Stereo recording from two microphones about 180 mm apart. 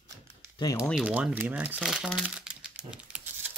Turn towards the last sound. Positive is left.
turn(degrees=-5)  # may be behind; listen again after turning